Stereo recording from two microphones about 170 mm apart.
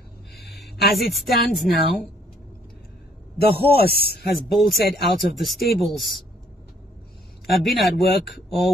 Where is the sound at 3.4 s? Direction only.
65° left (ahead or behind).